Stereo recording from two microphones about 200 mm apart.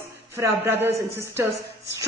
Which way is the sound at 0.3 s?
15° right (ahead or behind).